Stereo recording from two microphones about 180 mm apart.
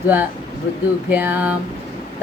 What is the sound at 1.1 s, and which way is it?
Speech, 10° right (ahead or behind).